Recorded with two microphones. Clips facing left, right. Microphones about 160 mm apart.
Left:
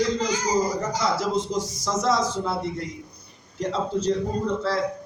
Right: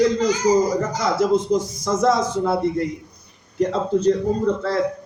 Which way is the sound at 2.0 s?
50° right (ahead or behind).